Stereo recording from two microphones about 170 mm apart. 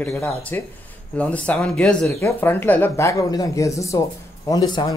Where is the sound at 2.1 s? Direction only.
15° left (ahead or behind).